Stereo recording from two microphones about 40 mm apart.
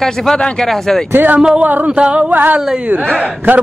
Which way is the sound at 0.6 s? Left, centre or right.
Centre.